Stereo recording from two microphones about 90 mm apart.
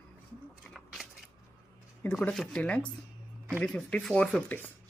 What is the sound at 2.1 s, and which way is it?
Speech, 10° left (ahead or behind).